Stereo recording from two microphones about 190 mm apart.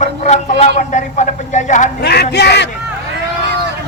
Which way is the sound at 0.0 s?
35° left (ahead or behind).